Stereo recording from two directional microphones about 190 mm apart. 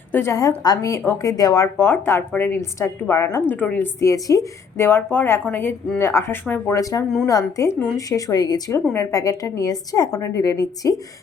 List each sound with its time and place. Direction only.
0.1 s a woman's voice: 15° left (ahead or behind)